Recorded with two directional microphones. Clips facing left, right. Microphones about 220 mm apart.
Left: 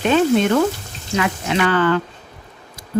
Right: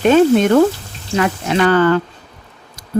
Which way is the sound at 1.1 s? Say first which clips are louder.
Right 4 dB; 45° right (ahead or behind).